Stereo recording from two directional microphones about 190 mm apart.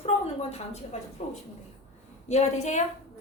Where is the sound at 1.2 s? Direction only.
40° left (ahead or behind).